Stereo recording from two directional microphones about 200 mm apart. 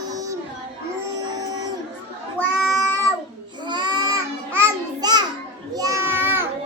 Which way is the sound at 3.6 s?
20° right (ahead or behind).